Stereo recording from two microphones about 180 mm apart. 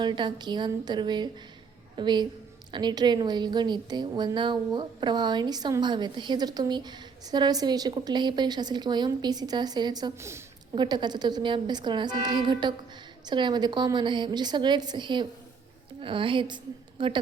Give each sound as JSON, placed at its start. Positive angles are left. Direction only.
{"t": 0.0, "sound": "a woman's voice", "side_deg": -25}